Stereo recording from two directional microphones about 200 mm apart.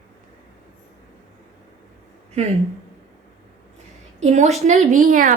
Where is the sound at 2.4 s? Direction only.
35° right (ahead or behind).